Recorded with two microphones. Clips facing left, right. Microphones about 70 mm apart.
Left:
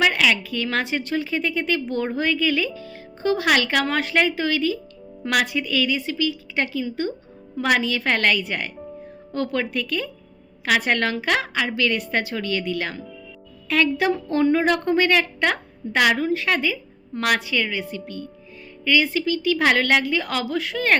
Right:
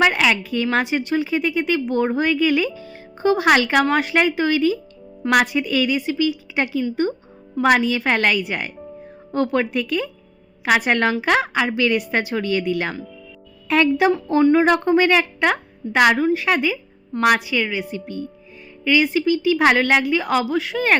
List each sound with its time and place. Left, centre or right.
0.0 s a woman's voice: right
14.4 s a woman's voice: centre